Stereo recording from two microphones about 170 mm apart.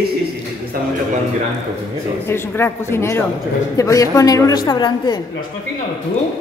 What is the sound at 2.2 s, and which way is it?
A woman's voice, 15° left (ahead or behind).